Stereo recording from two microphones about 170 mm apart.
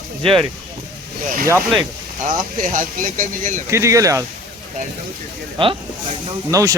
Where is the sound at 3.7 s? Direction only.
15° right (ahead or behind).